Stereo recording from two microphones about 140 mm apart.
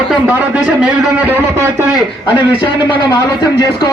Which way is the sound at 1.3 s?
15° right (ahead or behind).